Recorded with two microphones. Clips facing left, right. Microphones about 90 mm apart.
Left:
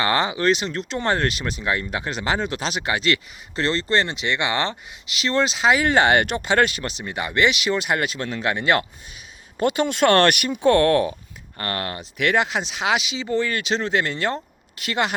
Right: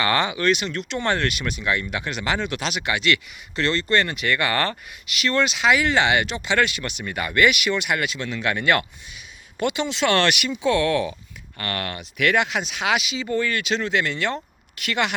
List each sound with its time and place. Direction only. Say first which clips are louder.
0.0 s speech: left 1 dB; 30° left (ahead or behind)
9.6 s speech: left 4 dB; 40° left (ahead or behind)
11.5 s speech: left 1 dB; 30° left (ahead or behind)